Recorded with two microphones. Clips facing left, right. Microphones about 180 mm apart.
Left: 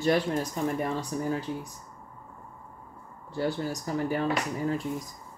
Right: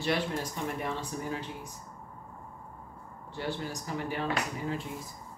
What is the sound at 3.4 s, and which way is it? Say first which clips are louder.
Speech: left 6 dB; 35° left (ahead or behind).